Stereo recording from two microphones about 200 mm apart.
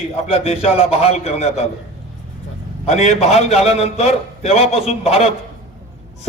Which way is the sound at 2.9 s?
35° left (ahead or behind).